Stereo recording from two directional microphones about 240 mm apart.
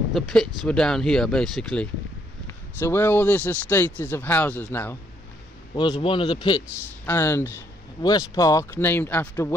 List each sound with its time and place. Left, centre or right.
0.1 s speech: centre
5.8 s speech: left